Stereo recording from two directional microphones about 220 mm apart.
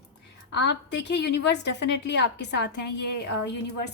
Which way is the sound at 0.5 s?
50° left (ahead or behind).